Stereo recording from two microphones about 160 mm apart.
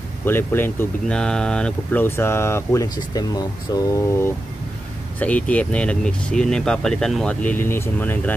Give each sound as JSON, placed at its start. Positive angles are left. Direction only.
{"t": 0.2, "sound": "speech", "side_deg": 15}